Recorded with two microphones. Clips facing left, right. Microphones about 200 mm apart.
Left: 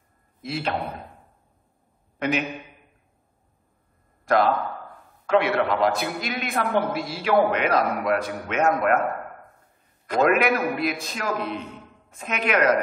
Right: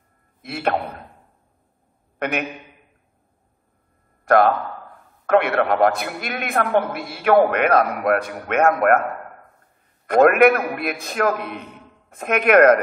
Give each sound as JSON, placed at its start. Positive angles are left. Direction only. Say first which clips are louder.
{"t": 0.4, "sound": "a man's voice", "louder": "right 4 dB", "side_deg": -55}
{"t": 2.1, "sound": "a man's voice", "louder": "even", "side_deg": -55}
{"t": 4.2, "sound": "a sound", "louder": "right 5 dB", "side_deg": -55}
{"t": 5.2, "sound": "a man's voice", "louder": "right 3 dB", "side_deg": -55}
{"t": 10.0, "sound": "a man's voice", "louder": "right 7 dB", "side_deg": -55}